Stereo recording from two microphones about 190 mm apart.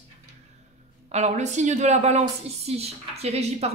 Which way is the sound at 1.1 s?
35° right (ahead or behind).